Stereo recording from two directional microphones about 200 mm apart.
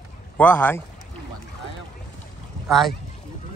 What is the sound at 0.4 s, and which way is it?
Speech, 10° left (ahead or behind).